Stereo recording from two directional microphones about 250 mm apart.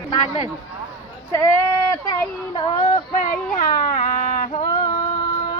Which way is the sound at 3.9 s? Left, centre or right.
Left.